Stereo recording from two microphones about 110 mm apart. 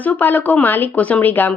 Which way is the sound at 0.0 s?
15° left (ahead or behind).